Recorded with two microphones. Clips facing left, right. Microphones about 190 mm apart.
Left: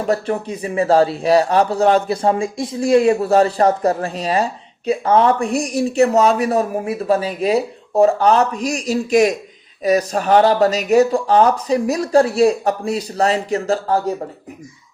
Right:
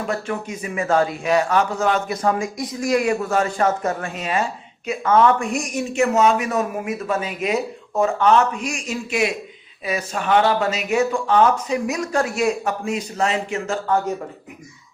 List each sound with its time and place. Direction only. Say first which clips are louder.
0.0 s speech: left 6 dB; 35° left (ahead or behind)